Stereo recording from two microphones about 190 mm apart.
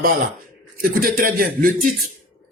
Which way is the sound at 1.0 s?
50° right (ahead or behind).